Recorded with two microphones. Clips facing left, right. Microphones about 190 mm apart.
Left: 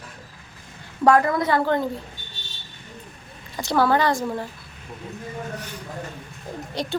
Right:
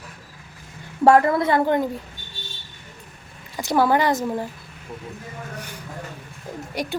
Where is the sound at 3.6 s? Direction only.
15° right (ahead or behind).